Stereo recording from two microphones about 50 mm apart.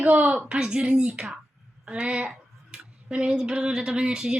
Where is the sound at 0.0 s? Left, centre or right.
Right.